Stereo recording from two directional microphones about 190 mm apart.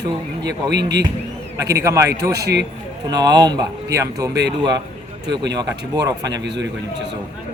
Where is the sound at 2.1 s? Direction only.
60° right (ahead or behind).